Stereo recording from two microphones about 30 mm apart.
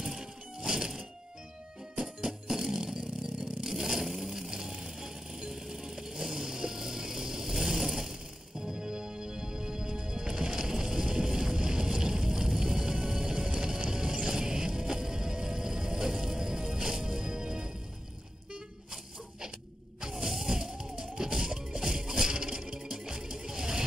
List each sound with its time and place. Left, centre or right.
0.0 s music: centre
2.2 s a sound: centre
3.6 s vehicle: centre
4.2 s music: centre
7.8 s vehicle: centre
8.1 s music: right
20.0 s music: centre